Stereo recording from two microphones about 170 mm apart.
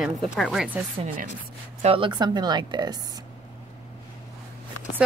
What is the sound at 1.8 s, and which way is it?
A woman's voice, 30° right (ahead or behind).